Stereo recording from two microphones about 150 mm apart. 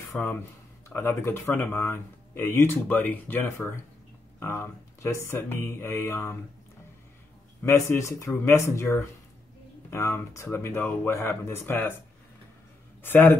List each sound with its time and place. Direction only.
0.8 s speech: 15° left (ahead or behind)
7.6 s speech: 20° left (ahead or behind)
13.0 s speech: 15° left (ahead or behind)